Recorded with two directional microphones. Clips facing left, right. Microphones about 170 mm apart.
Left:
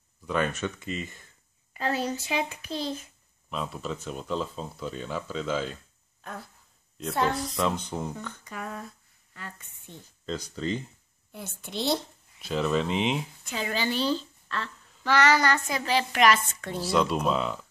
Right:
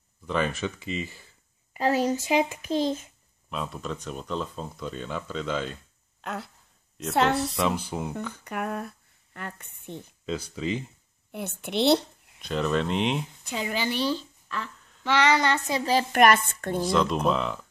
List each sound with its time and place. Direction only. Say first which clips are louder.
0.5 s speech: right 1 dB; 10° right (ahead or behind)
1.7 s a child's voice: right 5 dB; 20° right (ahead or behind)
3.4 s speech: even; centre (ahead or behind)
6.2 s speech: right 6 dB; 80° right
7.5 s speech: right 1 dB; 5° right (ahead or behind)
8.5 s speech: right 7 dB; 60° right (ahead or behind)
10.5 s speech: even; 10° right (ahead or behind)
11.3 s a child's voice: right 7 dB; 65° right (ahead or behind)
12.4 s speech: even; 5° left (ahead or behind)
13.5 s a woman's voice: right 1 dB; 15° right (ahead or behind)
15.8 s a woman's voice: right 4 dB; 40° right (ahead or behind)
16.8 s speech: right 1 dB; 5° left (ahead or behind)